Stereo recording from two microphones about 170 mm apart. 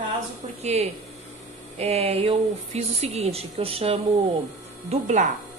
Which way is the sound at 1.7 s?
35° right (ahead or behind).